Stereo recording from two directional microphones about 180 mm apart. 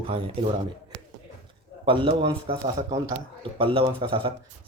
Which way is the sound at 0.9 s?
65° right (ahead or behind).